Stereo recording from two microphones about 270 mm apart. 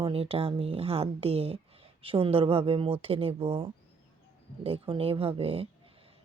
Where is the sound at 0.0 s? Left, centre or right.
Right.